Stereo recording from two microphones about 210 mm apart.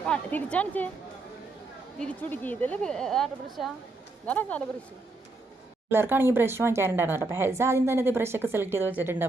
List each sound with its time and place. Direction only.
0.0 s speech: 5° left (ahead or behind)
2.0 s a woman's voice: 5° left (ahead or behind)
5.9 s speech: 10° right (ahead or behind)